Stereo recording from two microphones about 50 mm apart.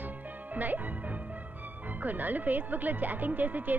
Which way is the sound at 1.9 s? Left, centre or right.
Right.